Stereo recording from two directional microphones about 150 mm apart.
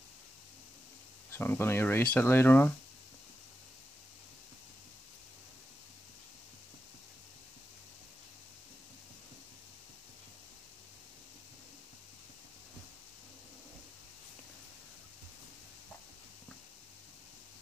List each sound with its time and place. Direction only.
1.3 s speech: 15° left (ahead or behind)